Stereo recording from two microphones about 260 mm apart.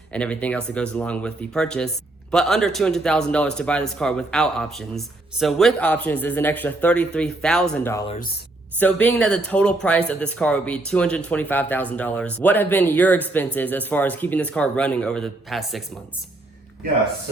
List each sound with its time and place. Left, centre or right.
0.1 s a man's voice: centre
8.0 s speech: left
8.8 s a man's voice: centre